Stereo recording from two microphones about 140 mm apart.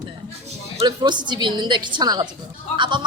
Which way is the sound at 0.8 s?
30° right (ahead or behind).